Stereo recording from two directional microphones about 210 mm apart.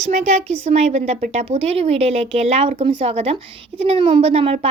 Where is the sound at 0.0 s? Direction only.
30° right (ahead or behind).